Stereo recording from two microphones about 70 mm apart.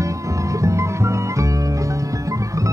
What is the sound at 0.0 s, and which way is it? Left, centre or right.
Music, right.